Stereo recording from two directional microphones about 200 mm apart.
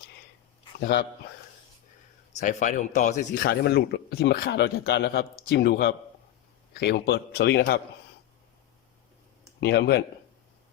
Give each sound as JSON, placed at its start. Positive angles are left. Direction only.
{"t": 0.8, "sound": "a man's voice", "side_deg": 55}
{"t": 2.4, "sound": "a man's voice", "side_deg": 40}
{"t": 9.6, "sound": "speech", "side_deg": 55}